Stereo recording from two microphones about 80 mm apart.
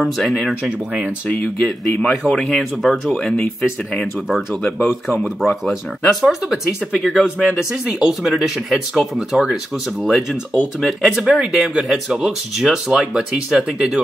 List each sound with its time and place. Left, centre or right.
0.0 s speech: centre
0.7 s speech: centre
1.9 s speech: centre
3.1 s speech: centre
4.6 s speech: left
5.7 s speech: centre